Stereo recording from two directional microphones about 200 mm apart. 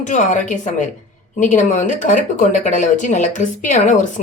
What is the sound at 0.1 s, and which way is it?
Speech, 40° left (ahead or behind).